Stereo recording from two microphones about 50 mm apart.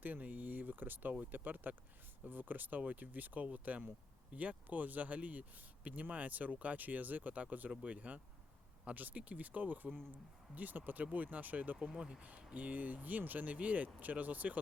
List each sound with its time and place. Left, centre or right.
0.0 s a sound: right
1.2 s speech: right
11.9 s speech: centre
12.5 s speech: right